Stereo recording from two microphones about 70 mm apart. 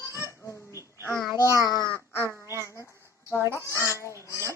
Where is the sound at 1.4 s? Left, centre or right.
Right.